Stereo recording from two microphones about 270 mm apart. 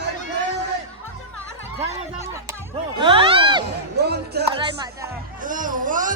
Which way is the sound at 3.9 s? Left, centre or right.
Right.